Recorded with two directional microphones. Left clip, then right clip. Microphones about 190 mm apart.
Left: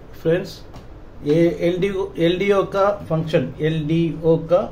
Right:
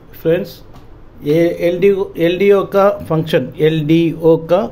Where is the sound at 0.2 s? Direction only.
25° right (ahead or behind).